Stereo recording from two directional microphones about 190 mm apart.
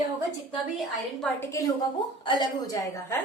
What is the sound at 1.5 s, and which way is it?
A woman's voice, 15° left (ahead or behind).